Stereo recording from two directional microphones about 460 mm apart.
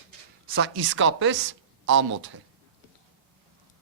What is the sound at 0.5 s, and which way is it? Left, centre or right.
Speech, right.